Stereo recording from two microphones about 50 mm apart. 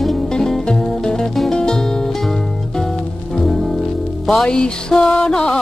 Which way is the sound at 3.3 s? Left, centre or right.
Centre.